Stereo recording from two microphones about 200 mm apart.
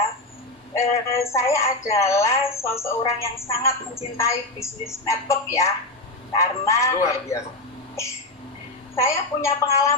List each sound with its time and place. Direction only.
0.7 s a woman's voice: 15° left (ahead or behind)
9.0 s a woman's voice: 15° left (ahead or behind)